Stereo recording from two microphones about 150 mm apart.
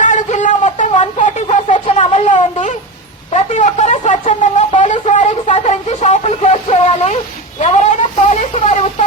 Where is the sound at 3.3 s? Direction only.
55° left (ahead or behind).